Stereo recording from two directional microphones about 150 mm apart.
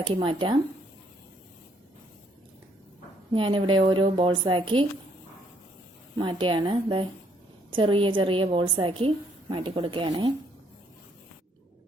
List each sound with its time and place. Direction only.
0.0 s a woman's voice: 35° right (ahead or behind)
3.3 s a woman's voice: 35° right (ahead or behind)
6.1 s a woman's voice: 35° right (ahead or behind)